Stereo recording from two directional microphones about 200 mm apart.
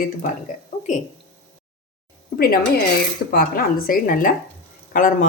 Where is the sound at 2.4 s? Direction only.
45° left (ahead or behind).